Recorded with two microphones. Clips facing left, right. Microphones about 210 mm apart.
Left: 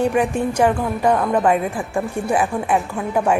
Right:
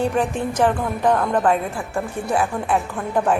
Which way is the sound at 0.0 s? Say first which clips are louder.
Left 3 dB; 10° left (ahead or behind).